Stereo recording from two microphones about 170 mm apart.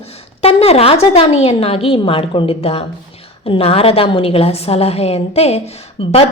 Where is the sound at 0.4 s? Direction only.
35° left (ahead or behind).